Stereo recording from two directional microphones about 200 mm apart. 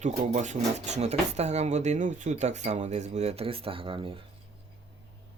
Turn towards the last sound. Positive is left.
turn(degrees=-25)  # may be behind; listen again after turning